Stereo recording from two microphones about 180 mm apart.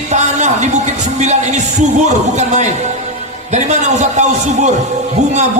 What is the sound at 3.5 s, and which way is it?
A man's voice, 40° right (ahead or behind).